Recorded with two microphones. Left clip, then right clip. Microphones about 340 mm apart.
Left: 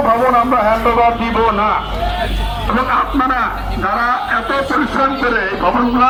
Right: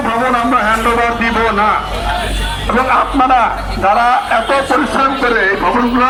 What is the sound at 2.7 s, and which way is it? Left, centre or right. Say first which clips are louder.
A man's voice: right 3 dB; centre.